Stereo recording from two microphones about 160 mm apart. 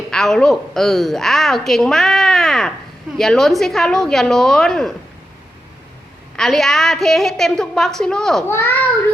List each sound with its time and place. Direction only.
0.1 s a woman's voice: 5° left (ahead or behind)
6.3 s a woman's voice: 5° left (ahead or behind)
8.4 s a child's voice: 15° left (ahead or behind)